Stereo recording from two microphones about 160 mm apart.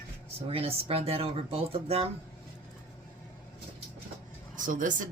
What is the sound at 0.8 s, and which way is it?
Speech, 40° right (ahead or behind).